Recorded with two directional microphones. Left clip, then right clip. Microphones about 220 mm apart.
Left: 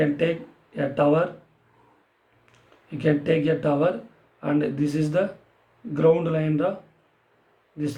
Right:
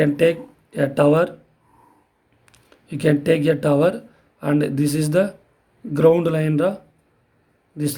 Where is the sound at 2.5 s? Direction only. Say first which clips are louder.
Right 4 dB; 50° right (ahead or behind).